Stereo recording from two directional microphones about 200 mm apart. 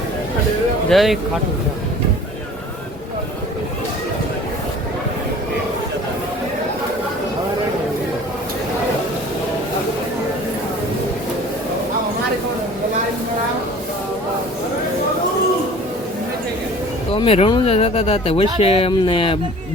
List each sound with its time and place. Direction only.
0.9 s speech: centre (ahead or behind)
17.1 s speech: 30° left (ahead or behind)